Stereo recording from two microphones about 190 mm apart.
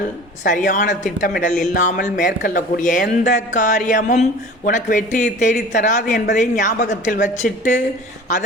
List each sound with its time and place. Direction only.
0.4 s a woman's voice: 40° left (ahead or behind)